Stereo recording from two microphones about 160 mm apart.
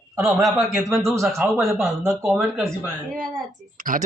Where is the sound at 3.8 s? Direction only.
55° right (ahead or behind).